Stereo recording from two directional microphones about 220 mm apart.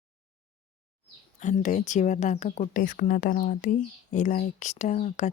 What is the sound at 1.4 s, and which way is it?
Speech, 35° left (ahead or behind).